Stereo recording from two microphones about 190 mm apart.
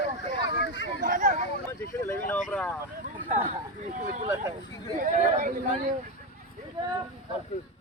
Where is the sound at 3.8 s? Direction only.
40° right (ahead or behind).